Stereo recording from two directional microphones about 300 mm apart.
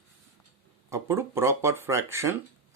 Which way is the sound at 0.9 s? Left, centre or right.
Centre.